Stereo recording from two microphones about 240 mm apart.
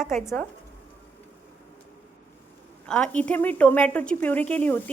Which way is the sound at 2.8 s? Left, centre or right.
Centre.